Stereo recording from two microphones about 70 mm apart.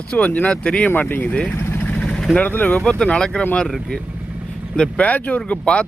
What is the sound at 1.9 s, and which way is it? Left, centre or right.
Vehicle, centre.